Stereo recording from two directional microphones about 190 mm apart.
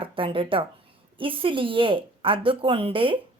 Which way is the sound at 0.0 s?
30° right (ahead or behind).